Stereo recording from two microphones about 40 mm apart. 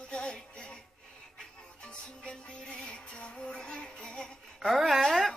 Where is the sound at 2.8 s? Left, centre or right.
Left.